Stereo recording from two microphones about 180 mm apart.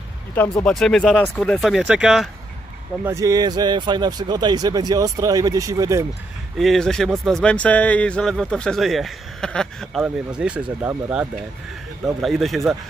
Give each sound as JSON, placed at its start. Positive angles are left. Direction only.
{"t": 0.7, "sound": "a man's voice", "side_deg": 5}
{"t": 3.0, "sound": "speech", "side_deg": -15}
{"t": 6.6, "sound": "a man's voice", "side_deg": 0}